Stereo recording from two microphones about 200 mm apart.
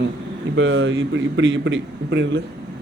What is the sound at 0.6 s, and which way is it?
A man's voice, 65° right (ahead or behind).